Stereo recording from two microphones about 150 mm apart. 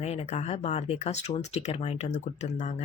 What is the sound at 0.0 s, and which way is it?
Speech, 45° left (ahead or behind).